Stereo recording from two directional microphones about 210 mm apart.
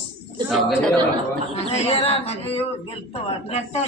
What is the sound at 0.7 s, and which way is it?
Speech, centre (ahead or behind).